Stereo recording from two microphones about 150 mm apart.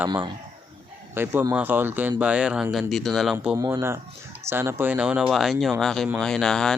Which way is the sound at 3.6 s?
20° right (ahead or behind).